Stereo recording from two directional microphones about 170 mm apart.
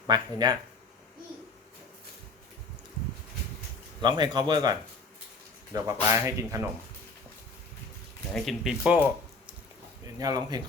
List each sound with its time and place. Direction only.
0.1 s speech: 25° right (ahead or behind)
4.0 s speech: 25° right (ahead or behind)
8.4 s speech: 5° right (ahead or behind)
10.2 s speech: 20° right (ahead or behind)